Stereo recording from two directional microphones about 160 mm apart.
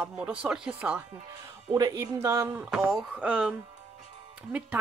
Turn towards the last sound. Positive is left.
turn(degrees=-10)  # may be behind; listen again after turning